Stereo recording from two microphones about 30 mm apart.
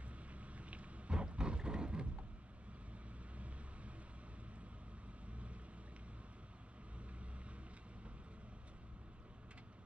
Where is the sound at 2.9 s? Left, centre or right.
Right.